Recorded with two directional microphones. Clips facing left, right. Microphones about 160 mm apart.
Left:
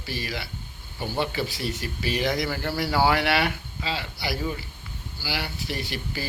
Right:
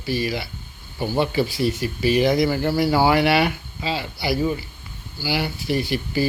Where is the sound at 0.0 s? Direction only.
15° right (ahead or behind).